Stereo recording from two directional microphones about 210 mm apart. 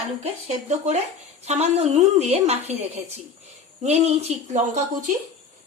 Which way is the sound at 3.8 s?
30° right (ahead or behind).